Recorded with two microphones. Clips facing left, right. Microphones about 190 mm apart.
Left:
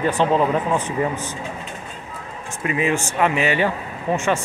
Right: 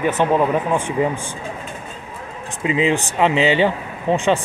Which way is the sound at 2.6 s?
20° right (ahead or behind).